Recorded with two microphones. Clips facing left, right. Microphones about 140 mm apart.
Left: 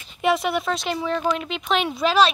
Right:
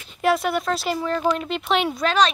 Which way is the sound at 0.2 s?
Centre (ahead or behind).